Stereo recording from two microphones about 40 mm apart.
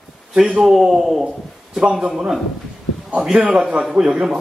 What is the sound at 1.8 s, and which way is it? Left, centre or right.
Speech, right.